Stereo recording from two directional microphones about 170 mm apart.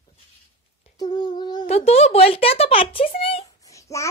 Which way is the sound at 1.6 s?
40° left (ahead or behind).